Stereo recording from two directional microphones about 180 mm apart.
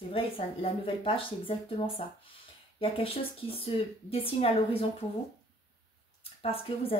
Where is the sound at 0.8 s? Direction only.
30° left (ahead or behind).